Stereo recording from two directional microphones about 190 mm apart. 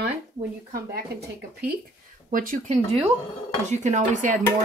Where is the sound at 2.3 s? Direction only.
40° right (ahead or behind).